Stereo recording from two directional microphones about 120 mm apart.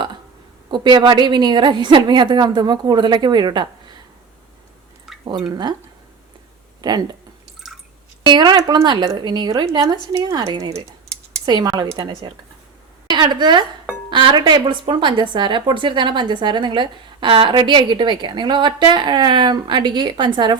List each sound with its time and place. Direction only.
0.7 s a woman's voice: 40° right (ahead or behind)
5.5 s a woman's voice: 35° right (ahead or behind)
6.8 s a woman's voice: 35° right (ahead or behind)
8.3 s a woman's voice: 35° right (ahead or behind)
11.4 s a woman's voice: 35° right (ahead or behind)